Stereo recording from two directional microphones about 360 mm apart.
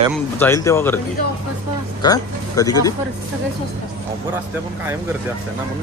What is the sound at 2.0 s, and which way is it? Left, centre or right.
Speech, centre.